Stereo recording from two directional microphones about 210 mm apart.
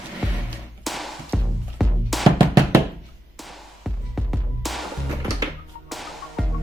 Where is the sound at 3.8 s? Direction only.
Centre (ahead or behind).